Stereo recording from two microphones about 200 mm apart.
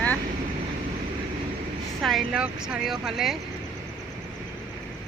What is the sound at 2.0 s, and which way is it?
Speech, 5° right (ahead or behind).